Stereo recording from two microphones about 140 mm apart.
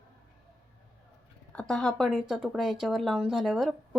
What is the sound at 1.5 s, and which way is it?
Speech, 5° left (ahead or behind).